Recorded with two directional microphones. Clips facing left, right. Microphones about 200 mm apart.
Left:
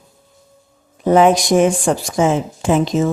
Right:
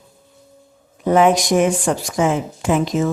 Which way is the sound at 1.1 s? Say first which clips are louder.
Left 2 dB; 30° left (ahead or behind).